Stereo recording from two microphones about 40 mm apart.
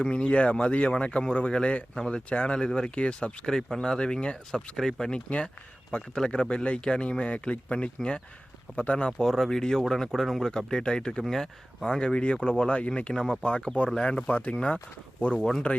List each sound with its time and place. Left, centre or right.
0.0 s speech: left
2.9 s speech: left
3.4 s speech: centre
9.1 s speech: centre
10.7 s speech: centre
11.2 s speech: centre
11.9 s speech: left
14.3 s speech: left